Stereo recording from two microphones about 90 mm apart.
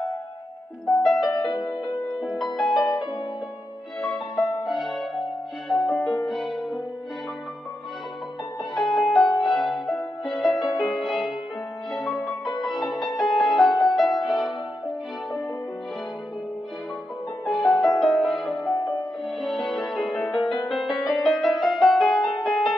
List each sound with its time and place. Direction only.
0.8 s music: 5° left (ahead or behind)
1.5 s music: 55° left (ahead or behind)
2.0 s music: centre (ahead or behind)
4.6 s music: centre (ahead or behind)
8.7 s music: centre (ahead or behind)
17.5 s music: centre (ahead or behind)